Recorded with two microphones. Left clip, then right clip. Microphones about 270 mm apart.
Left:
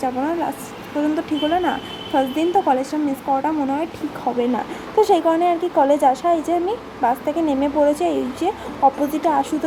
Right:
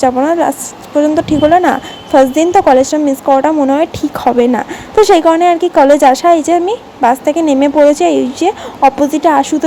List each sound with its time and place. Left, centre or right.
0.0 s a woman's voice: right